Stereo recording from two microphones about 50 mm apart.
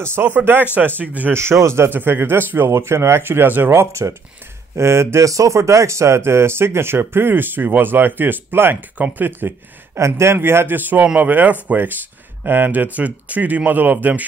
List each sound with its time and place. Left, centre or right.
0.0 s speech: right
0.8 s speech: right
1.3 s speech: right
1.9 s speech: right
3.7 s speech: right
9.9 s speech: right
10.8 s speech: right